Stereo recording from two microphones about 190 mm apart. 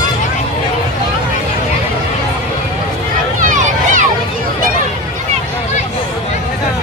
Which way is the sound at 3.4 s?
40° right (ahead or behind).